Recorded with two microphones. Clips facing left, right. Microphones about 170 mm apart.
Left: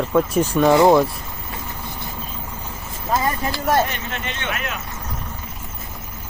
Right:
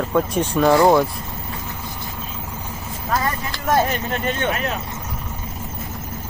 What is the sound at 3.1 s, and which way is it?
Speech, 20° left (ahead or behind).